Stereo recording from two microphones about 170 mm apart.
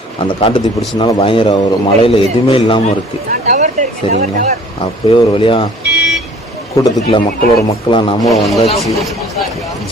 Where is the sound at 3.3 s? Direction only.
45° right (ahead or behind).